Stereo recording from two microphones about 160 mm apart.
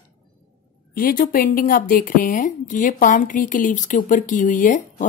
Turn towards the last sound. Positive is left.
turn(degrees=55)  # may be behind; listen again after turning